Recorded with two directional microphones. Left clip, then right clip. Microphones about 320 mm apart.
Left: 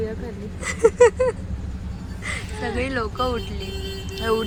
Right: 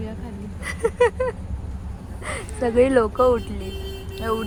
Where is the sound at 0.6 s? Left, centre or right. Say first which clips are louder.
Left 5 dB; centre.